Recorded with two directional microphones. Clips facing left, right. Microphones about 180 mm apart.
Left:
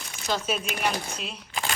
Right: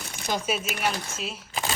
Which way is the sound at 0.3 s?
10° right (ahead or behind).